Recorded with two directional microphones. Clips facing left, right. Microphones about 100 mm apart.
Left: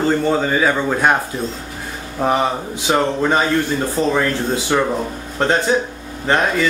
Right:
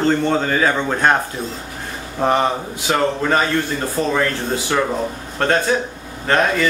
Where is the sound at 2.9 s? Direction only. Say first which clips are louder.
Left 1 dB; 15° left (ahead or behind).